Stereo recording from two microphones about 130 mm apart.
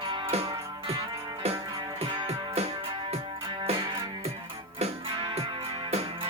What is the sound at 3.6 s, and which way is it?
Music, 45° right (ahead or behind).